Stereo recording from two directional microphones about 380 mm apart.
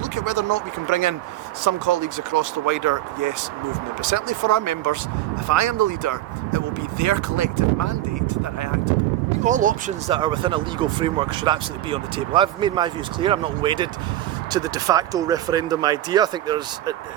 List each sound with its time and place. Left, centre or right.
0.2 s speech: right
9.4 s speech: centre